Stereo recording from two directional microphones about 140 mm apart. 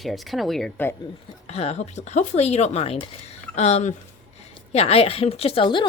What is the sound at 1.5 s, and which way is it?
Speech, 50° left (ahead or behind).